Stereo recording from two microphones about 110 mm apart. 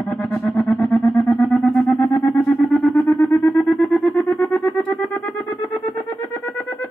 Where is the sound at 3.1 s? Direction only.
5° left (ahead or behind).